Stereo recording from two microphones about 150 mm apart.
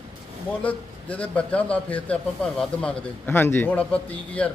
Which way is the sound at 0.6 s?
10° left (ahead or behind).